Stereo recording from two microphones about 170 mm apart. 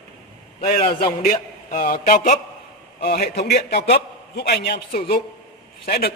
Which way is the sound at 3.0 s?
65° left (ahead or behind).